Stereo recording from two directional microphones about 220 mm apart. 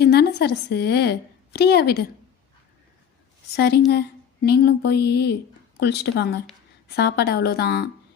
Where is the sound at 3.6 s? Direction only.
45° left (ahead or behind).